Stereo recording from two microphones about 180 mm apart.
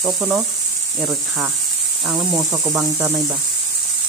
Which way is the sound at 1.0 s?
15° right (ahead or behind).